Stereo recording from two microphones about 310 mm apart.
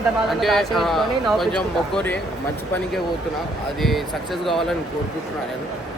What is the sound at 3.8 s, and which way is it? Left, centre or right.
Speech, centre.